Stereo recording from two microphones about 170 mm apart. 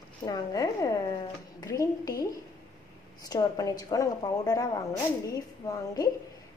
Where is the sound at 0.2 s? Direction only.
20° left (ahead or behind).